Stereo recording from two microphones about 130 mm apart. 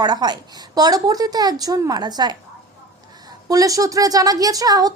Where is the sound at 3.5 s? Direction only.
25° right (ahead or behind).